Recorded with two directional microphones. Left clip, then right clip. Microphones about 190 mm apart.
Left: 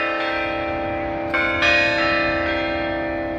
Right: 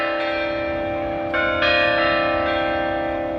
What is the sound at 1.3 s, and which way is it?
Change ringing, 35° right (ahead or behind).